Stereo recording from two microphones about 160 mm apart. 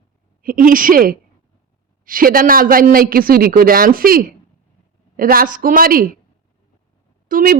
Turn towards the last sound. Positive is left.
turn(degrees=-60)  # may be behind; listen again after turning